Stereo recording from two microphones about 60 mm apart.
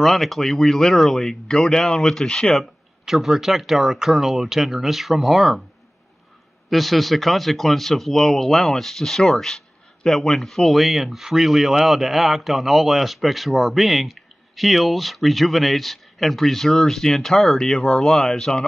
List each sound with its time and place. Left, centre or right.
0.0 s speech: centre
2.5 s speech: centre
6.7 s speech: centre